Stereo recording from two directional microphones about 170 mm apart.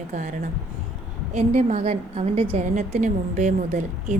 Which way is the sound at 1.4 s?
40° right (ahead or behind).